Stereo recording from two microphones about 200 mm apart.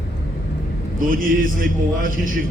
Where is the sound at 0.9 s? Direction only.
45° right (ahead or behind).